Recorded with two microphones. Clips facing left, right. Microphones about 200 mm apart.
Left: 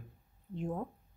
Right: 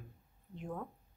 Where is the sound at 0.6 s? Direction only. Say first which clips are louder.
Left 5 dB; 30° left (ahead or behind).